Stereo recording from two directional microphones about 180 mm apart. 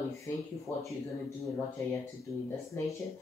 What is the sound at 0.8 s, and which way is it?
Speech, 15° left (ahead or behind).